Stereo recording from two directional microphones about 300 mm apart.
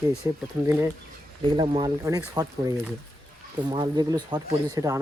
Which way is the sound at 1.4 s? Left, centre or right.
Centre.